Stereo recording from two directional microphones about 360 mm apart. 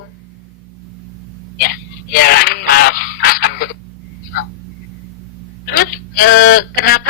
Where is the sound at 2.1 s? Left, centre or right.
Left.